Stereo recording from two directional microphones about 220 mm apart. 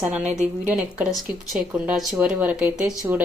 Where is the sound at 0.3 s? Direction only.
5° right (ahead or behind).